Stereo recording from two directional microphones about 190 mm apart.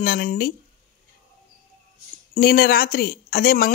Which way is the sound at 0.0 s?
50° left (ahead or behind).